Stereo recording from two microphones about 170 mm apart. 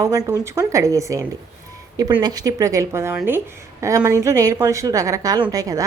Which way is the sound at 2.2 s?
20° right (ahead or behind).